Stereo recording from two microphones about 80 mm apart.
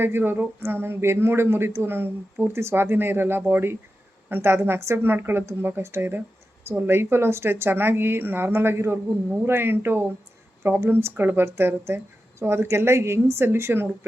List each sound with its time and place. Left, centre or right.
0.0 s a woman's voice: right